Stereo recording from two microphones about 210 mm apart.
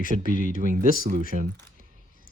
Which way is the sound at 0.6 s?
40° right (ahead or behind).